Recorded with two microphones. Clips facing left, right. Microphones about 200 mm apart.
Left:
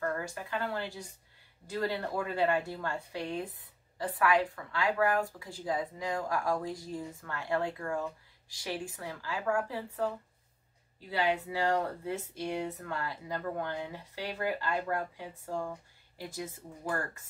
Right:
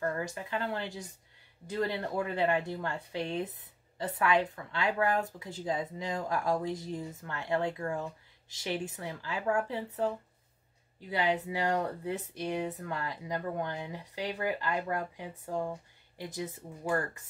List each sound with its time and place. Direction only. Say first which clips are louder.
0.0 s speech: right 1 dB; 20° right (ahead or behind)
11.1 s speech: even; 20° right (ahead or behind)